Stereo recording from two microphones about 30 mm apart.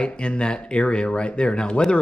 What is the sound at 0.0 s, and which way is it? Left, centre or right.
Speech, left.